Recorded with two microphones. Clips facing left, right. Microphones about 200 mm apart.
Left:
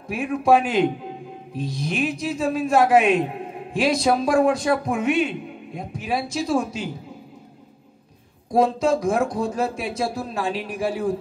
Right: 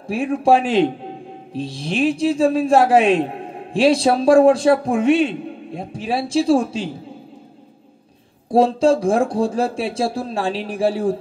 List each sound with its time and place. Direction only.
0.0 s a man's voice: 30° right (ahead or behind)
8.5 s a man's voice: 30° right (ahead or behind)